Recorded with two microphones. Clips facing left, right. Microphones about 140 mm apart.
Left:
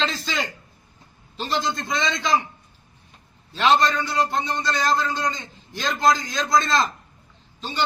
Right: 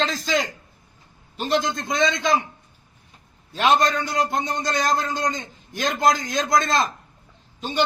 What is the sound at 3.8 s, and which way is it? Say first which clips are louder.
Speech: even; 45° right (ahead or behind).